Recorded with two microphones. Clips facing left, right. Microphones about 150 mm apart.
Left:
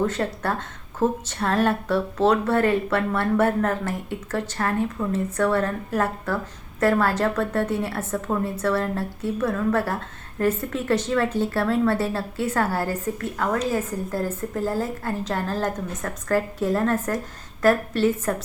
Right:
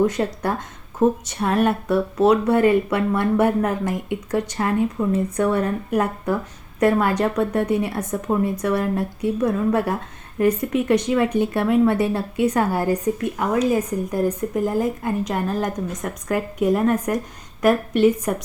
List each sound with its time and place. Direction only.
0.0 s speech: 15° right (ahead or behind)